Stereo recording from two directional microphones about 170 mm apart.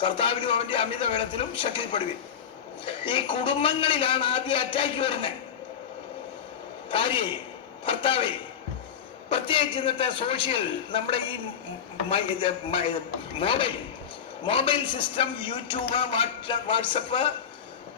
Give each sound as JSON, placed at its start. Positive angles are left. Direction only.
{"t": 0.0, "sound": "a man's voice", "side_deg": 30}
{"t": 6.9, "sound": "a man's voice", "side_deg": 30}
{"t": 9.3, "sound": "a man's voice", "side_deg": 30}
{"t": 12.0, "sound": "a man's voice", "side_deg": 35}